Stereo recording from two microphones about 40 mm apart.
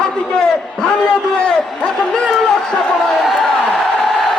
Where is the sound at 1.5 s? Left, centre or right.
Centre.